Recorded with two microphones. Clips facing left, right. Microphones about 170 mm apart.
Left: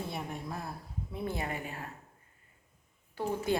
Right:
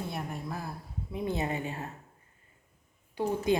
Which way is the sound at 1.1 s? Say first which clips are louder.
Right 4 dB; 20° right (ahead or behind).